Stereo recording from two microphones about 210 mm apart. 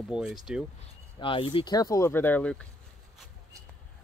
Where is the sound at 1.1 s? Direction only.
25° left (ahead or behind); by 2.6 s 5° left (ahead or behind).